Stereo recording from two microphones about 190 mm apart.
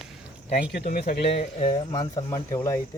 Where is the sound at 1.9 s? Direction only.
20° left (ahead or behind).